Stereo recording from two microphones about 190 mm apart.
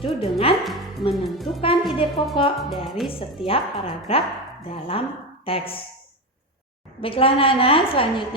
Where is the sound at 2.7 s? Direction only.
Centre (ahead or behind).